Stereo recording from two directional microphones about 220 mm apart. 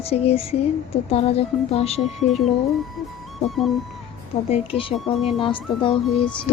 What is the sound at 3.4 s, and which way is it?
Speech, centre (ahead or behind).